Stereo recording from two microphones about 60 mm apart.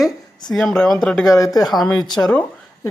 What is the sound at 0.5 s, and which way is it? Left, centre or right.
Speech, centre.